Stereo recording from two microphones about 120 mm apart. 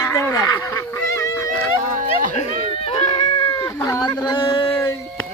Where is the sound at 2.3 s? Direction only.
60° left (ahead or behind).